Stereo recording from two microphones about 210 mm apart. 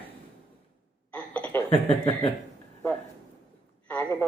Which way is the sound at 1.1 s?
5° left (ahead or behind).